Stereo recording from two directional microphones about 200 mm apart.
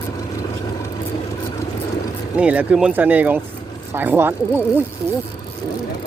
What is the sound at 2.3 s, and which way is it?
Speech, 5° right (ahead or behind).